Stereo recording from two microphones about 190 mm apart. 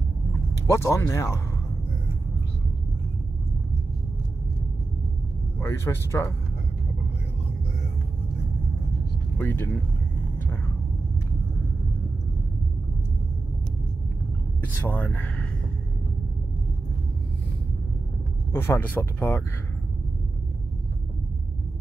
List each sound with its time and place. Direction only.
0.7 s speech: 15° left (ahead or behind)
5.6 s speech: 15° left (ahead or behind)
9.4 s speech: 10° left (ahead or behind)
14.9 s speech: 10° left (ahead or behind)
18.5 s speech: 10° left (ahead or behind)